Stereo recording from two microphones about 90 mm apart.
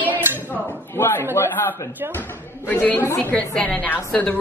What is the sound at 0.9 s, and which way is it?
A woman's voice, 25° left (ahead or behind).